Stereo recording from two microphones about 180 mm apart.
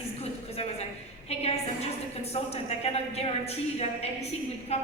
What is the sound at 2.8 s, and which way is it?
Speech, 35° left (ahead or behind).